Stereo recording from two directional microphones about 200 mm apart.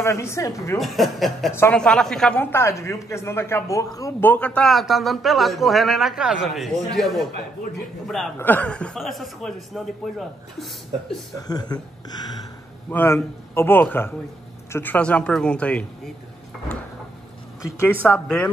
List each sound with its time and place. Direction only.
0.0 s speech: 15° left (ahead or behind)
0.7 s a man's voice: centre (ahead or behind)
8.4 s a man's voice: 10° left (ahead or behind)
11.3 s a man's voice: 20° left (ahead or behind)
17.8 s speech: 5° left (ahead or behind)